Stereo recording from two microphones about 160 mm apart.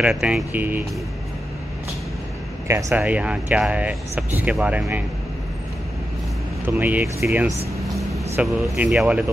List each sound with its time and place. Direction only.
0.0 s speech: 5° right (ahead or behind)
2.7 s speech: 10° right (ahead or behind)
6.6 s speech: 10° right (ahead or behind)
8.1 s speech: centre (ahead or behind)